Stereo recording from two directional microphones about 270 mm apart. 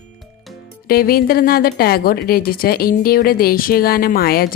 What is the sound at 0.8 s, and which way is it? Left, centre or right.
Speech, left.